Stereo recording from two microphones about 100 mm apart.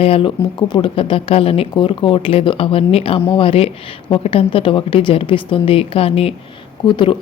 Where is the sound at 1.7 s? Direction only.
60° left (ahead or behind); by 6.3 s 75° left (ahead or behind).